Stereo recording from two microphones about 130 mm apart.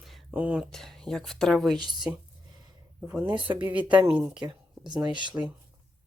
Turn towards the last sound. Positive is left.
turn(degrees=-35)  # may be behind; listen again after turning